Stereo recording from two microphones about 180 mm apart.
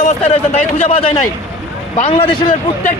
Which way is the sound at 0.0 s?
35° left (ahead or behind).